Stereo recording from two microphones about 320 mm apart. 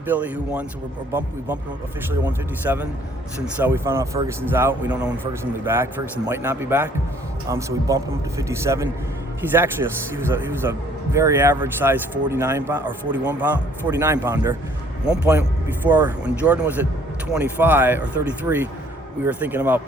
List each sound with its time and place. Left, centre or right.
0.1 s a man's voice: centre